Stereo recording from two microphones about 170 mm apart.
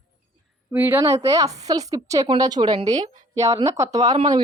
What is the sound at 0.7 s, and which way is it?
A woman's voice, 15° right (ahead or behind).